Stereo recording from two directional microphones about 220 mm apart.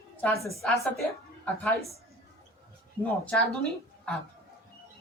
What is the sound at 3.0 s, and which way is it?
Speech, 5° left (ahead or behind).